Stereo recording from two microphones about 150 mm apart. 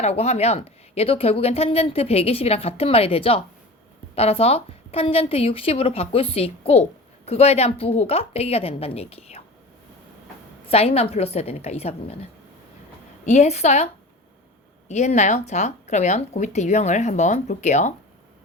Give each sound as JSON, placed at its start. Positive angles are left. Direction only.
{"t": 0.0, "sound": "speech", "side_deg": 45}
{"t": 10.7, "sound": "speech", "side_deg": 40}
{"t": 13.2, "sound": "speech", "side_deg": 50}